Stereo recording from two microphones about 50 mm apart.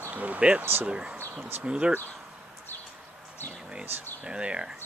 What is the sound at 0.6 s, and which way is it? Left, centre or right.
Speech, right.